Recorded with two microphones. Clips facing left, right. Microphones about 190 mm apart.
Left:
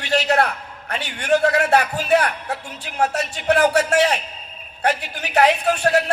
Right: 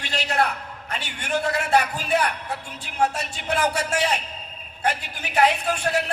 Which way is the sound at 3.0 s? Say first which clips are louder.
Left 2 dB; 65° left (ahead or behind).